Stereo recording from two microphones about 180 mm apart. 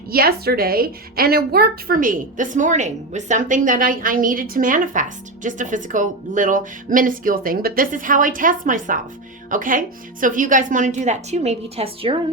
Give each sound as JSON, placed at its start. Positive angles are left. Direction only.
{"t": 0.1, "sound": "a woman's voice", "side_deg": -55}